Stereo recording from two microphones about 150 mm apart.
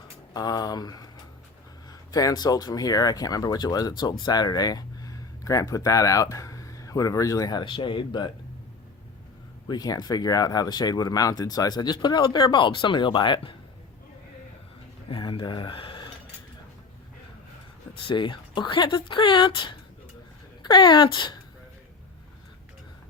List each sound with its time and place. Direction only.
0.3 s speech: 25° left (ahead or behind)
9.6 s speech: 25° left (ahead or behind)
15.1 s speech: 35° left (ahead or behind)
18.0 s speech: 30° left (ahead or behind)